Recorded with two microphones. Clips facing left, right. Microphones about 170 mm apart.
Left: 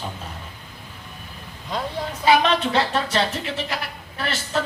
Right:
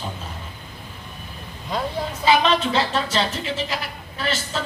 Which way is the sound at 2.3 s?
60° left (ahead or behind).